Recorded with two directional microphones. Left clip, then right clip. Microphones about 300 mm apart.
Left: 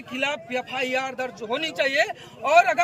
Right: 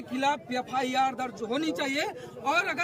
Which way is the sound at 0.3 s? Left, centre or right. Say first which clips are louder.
Left 1 dB; centre.